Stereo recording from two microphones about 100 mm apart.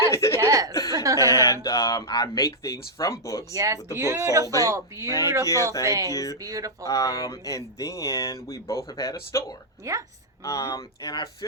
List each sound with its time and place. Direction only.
0.1 s speech: 30° left (ahead or behind)
0.3 s cough: 35° right (ahead or behind)
0.9 s a sound: 40° right (ahead or behind)
1.3 s speech: 30° left (ahead or behind)
3.5 s speech: 35° right (ahead or behind)
5.5 s speech: 30° left (ahead or behind)
5.8 s speech: 35° right (ahead or behind)
6.1 s speech: 35° left (ahead or behind)
6.4 s speech: 35° right (ahead or behind)
6.8 s speech: 35° left (ahead or behind)
9.8 s a woman's voice: 30° right (ahead or behind)
10.4 s speech: 35° left (ahead or behind)